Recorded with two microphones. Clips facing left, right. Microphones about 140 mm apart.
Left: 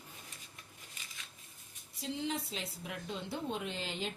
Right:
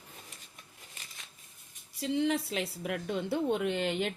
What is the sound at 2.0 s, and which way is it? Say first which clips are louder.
Speech: right 8 dB; 65° right (ahead or behind).